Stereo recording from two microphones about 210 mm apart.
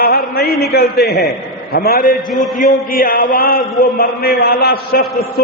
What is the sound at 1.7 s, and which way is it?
Speech, 45° left (ahead or behind).